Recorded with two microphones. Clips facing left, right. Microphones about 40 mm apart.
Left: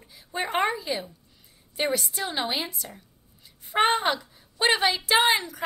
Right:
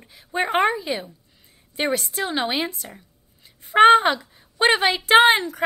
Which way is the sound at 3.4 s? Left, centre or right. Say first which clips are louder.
Right 9 dB; right.